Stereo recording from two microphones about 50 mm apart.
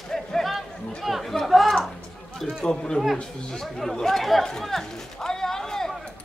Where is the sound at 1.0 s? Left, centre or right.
Centre.